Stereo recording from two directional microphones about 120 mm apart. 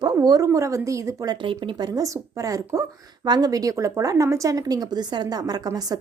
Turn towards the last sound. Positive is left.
turn(degrees=-30)  # may be behind; listen again after turning